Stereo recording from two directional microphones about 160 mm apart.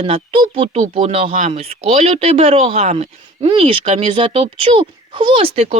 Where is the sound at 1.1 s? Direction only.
40° right (ahead or behind).